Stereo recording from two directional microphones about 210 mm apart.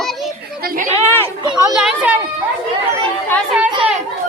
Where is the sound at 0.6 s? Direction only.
45° right (ahead or behind).